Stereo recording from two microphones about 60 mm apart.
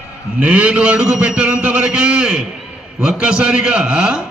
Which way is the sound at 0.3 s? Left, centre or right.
Right.